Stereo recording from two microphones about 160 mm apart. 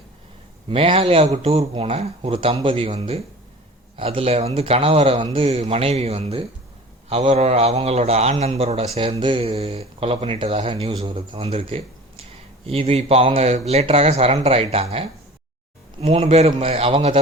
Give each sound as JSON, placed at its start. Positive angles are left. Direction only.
{"t": 0.7, "sound": "speech", "side_deg": -35}